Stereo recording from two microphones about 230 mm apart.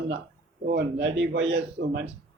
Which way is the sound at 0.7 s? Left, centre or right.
Right.